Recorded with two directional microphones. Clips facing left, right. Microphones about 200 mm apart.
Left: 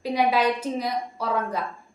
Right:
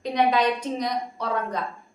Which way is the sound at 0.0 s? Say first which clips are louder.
Even; 5° left (ahead or behind).